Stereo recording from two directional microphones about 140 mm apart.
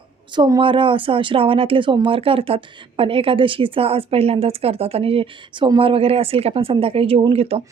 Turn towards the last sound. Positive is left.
turn(degrees=-45)  # may be behind; listen again after turning